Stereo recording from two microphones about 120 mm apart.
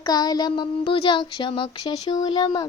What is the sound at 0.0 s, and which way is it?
Speech, 35° left (ahead or behind).